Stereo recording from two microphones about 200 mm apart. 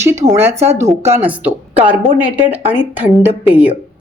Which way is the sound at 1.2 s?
10° right (ahead or behind).